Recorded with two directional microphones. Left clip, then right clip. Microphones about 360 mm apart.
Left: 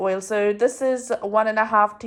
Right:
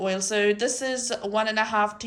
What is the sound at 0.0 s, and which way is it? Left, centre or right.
Speech, centre.